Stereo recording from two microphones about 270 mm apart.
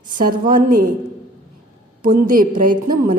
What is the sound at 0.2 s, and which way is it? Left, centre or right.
Speech, right.